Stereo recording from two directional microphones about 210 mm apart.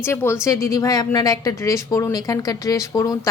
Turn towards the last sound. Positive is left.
turn(degrees=15)  # may be behind; listen again after turning